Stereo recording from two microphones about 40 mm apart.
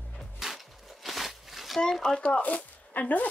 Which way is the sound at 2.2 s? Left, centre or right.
Left.